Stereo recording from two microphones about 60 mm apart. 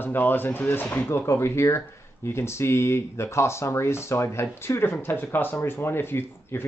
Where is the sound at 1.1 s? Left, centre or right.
Left.